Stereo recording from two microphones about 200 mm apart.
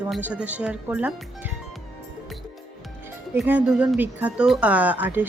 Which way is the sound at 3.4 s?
5° right (ahead or behind).